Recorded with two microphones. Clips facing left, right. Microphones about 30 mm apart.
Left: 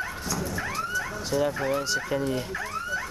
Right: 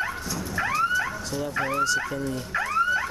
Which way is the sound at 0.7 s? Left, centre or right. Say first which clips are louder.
Right 9 dB; centre.